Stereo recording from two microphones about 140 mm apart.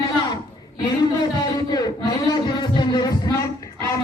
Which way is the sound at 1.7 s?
30° left (ahead or behind).